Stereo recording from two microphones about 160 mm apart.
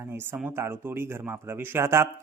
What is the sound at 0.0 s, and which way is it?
Speech, 15° right (ahead or behind).